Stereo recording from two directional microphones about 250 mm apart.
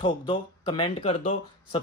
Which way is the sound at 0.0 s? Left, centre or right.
Centre.